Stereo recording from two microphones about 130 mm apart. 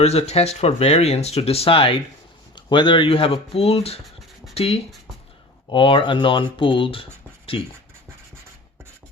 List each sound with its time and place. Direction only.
0.0 s speech: 55° left (ahead or behind)